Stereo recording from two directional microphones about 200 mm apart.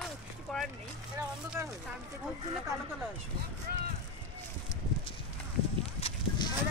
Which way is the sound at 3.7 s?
50° right (ahead or behind).